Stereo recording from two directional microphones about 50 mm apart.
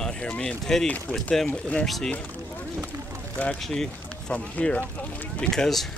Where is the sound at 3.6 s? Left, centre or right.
Centre.